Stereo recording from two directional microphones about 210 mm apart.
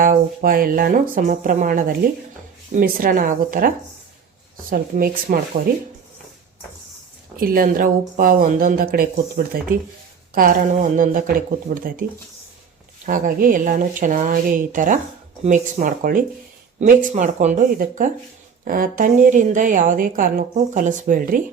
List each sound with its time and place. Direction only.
0.0 s a woman's voice: 40° right (ahead or behind)
4.7 s speech: 45° right (ahead or behind)
7.3 s a woman's voice: 45° right (ahead or behind)
13.1 s a woman's voice: 40° right (ahead or behind)